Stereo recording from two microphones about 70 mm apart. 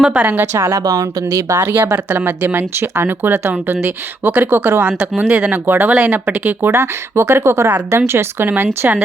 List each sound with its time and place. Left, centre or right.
0.0 s a woman's voice: centre
0.5 s speech: right
4.9 s speech: centre
5.6 s speech: right
6.7 s speech: right